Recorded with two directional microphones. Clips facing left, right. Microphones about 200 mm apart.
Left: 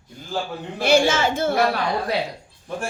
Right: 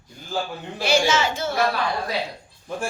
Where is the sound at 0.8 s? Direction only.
55° left (ahead or behind).